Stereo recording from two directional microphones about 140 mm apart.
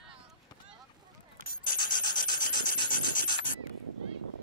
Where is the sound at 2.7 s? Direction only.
70° left (ahead or behind).